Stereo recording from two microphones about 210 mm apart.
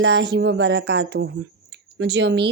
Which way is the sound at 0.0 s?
60° right (ahead or behind).